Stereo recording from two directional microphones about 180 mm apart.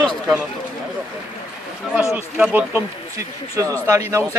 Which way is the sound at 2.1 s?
10° right (ahead or behind).